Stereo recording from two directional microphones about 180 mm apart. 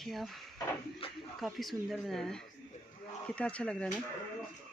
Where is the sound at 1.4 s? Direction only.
Centre (ahead or behind).